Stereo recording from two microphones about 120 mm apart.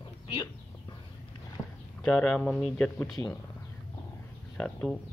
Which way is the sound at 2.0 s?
5° left (ahead or behind).